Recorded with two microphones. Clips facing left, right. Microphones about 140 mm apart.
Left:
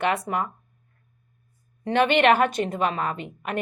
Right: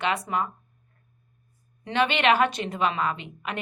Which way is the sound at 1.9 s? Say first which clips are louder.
Left 4 dB; 50° left (ahead or behind).